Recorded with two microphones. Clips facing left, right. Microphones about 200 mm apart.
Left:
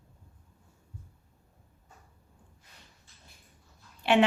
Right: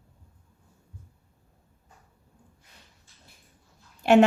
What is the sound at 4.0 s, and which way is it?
Speech, 45° right (ahead or behind).